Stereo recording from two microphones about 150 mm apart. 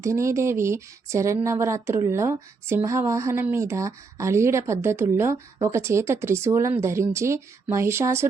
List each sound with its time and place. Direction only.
0.0 s speech: 20° right (ahead or behind)